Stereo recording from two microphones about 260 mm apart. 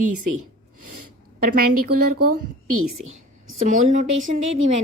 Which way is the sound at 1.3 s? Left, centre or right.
Right.